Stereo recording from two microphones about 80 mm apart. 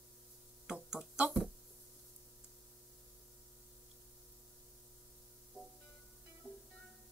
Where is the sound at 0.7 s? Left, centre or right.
Centre.